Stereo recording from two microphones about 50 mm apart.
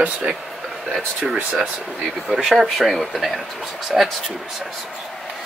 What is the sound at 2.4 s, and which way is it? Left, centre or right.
Speech, centre.